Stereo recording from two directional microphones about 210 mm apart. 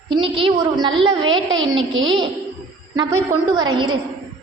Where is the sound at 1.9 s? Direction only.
65° right (ahead or behind).